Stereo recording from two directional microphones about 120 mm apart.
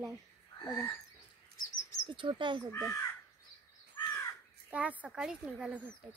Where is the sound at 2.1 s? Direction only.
40° right (ahead or behind).